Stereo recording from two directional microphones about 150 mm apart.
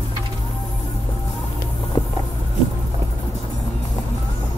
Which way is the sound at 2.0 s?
25° left (ahead or behind).